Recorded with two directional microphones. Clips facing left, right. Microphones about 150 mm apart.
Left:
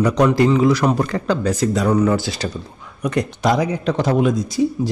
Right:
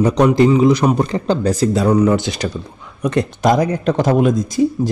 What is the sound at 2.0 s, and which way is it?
Speech, 20° right (ahead or behind).